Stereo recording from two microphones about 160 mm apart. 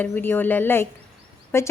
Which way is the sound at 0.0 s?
10° left (ahead or behind).